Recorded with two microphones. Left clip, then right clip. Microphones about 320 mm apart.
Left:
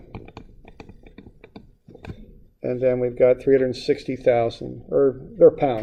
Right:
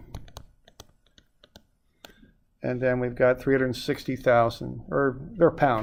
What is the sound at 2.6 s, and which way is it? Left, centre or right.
Speech, right.